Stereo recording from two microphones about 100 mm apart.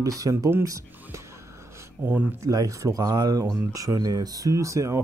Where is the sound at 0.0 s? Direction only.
35° right (ahead or behind).